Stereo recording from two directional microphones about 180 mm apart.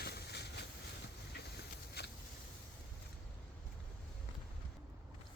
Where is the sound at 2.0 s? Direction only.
65° left (ahead or behind).